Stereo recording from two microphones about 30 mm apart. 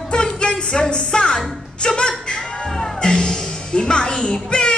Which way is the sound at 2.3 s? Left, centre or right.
Centre.